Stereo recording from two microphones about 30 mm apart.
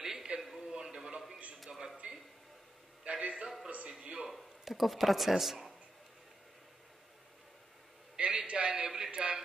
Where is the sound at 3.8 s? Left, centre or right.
Right.